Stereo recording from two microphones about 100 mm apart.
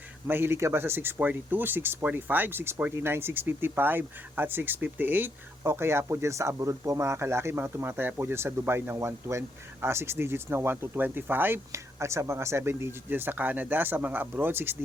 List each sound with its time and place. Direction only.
0.3 s speech: 20° right (ahead or behind)